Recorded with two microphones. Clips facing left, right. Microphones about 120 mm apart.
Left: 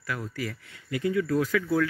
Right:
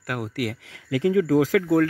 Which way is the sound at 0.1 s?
70° right (ahead or behind).